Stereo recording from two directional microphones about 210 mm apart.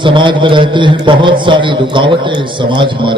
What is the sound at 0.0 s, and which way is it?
A man's voice, 25° right (ahead or behind).